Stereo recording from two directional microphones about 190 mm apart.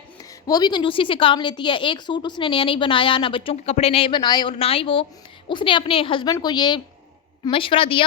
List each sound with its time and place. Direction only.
0.2 s a woman's voice: 20° left (ahead or behind)